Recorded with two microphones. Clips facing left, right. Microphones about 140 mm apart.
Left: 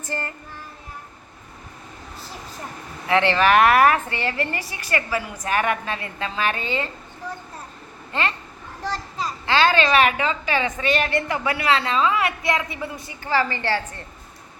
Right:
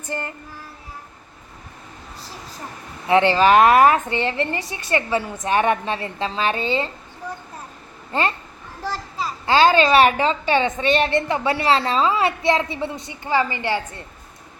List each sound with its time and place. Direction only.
0.1 s a woman's voice: 20° right (ahead or behind)
3.1 s a woman's voice: 25° right (ahead or behind)
8.8 s children playing: 5° right (ahead or behind)
9.6 s a woman's voice: 30° right (ahead or behind)